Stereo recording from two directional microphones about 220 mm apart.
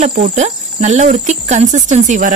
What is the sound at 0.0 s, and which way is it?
Cricket, 30° right (ahead or behind).